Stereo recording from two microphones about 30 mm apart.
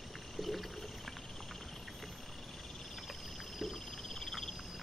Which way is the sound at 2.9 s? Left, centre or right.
Centre.